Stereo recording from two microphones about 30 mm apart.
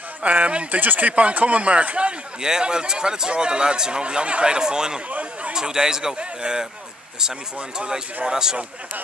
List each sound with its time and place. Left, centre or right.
0.2 s speech: right
0.7 s speech: right
1.1 s speech: right
2.6 s speech: right
2.9 s speech: right
4.0 s speech: right
4.6 s speech: right
8.3 s speech: right